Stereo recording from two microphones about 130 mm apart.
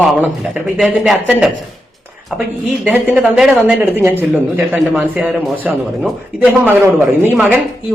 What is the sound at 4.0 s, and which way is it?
Speech, 15° right (ahead or behind).